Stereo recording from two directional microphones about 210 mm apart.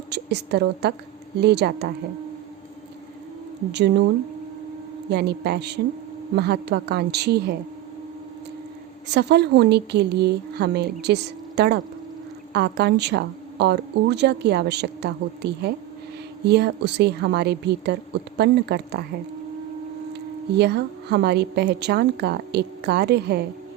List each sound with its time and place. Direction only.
0.1 s a woman's voice: 50° right (ahead or behind)
3.7 s speech: 55° right (ahead or behind)
5.1 s speech: 50° right (ahead or behind)
9.0 s a woman's voice: 55° right (ahead or behind)
20.1 s speech: 50° right (ahead or behind)